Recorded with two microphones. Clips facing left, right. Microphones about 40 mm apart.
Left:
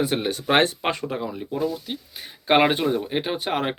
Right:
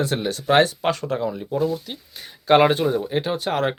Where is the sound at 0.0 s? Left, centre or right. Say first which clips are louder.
Even; centre.